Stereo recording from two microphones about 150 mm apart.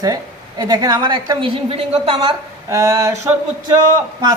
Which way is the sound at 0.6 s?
25° right (ahead or behind).